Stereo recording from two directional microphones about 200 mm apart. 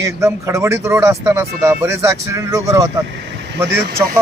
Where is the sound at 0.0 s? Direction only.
15° right (ahead or behind).